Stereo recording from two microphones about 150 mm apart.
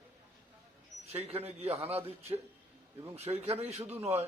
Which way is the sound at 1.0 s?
45° right (ahead or behind).